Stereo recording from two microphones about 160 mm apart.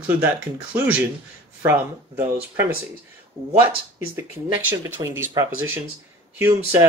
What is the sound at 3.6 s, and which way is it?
Speech, 15° right (ahead or behind).